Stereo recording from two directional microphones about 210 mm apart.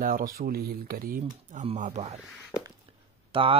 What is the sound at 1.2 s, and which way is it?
Speech, 30° right (ahead or behind).